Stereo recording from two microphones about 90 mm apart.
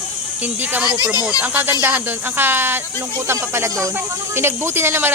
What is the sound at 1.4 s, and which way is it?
Speech, 20° right (ahead or behind).